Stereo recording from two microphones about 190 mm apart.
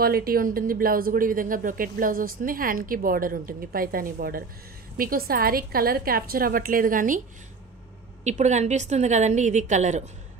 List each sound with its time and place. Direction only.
0.0 s speech: 50° right (ahead or behind)
8.2 s a woman's voice: 35° right (ahead or behind)